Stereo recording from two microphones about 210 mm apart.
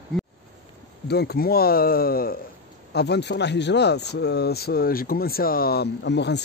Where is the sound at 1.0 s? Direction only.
50° left (ahead or behind).